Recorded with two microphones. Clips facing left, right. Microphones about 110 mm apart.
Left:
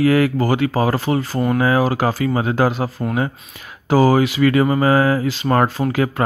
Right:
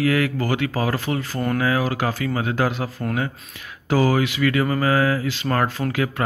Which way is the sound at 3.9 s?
30° left (ahead or behind).